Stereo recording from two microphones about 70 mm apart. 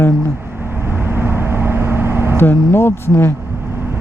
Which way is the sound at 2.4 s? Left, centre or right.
Left.